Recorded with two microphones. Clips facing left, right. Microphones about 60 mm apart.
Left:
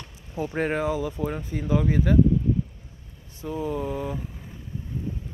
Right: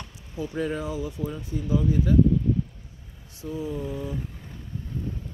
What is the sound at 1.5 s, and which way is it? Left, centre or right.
Speech, left.